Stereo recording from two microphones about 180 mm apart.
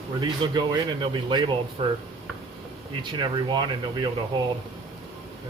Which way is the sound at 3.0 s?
25° right (ahead or behind).